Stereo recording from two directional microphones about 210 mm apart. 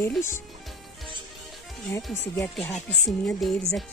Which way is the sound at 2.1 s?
10° left (ahead or behind).